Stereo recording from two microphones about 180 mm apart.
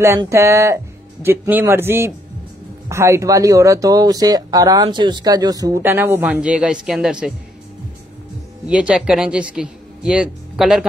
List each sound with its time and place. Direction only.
0.0 s a man's voice: 15° right (ahead or behind)
8.6 s a man's voice: 5° right (ahead or behind)